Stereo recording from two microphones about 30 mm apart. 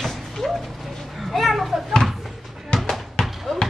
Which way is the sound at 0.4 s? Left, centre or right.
Centre.